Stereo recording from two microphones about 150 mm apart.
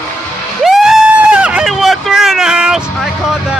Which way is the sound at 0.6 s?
Centre (ahead or behind).